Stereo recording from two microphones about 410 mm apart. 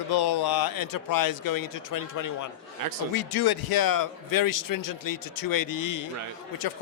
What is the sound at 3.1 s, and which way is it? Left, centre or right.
A man's voice, left.